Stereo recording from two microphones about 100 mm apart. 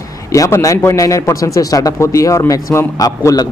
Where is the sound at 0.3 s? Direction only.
35° left (ahead or behind).